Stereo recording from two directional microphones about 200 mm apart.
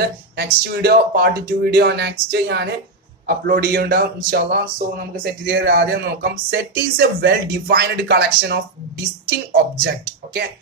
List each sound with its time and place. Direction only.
0.4 s speech: 50° right (ahead or behind)